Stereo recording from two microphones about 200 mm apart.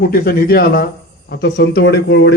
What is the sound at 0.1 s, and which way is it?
Speech, 50° left (ahead or behind).